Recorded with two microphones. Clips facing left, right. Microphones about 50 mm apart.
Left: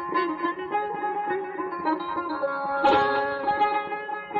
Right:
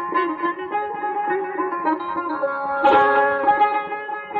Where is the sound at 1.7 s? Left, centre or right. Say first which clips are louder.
Right 1 dB; centre; by 3.6 s right.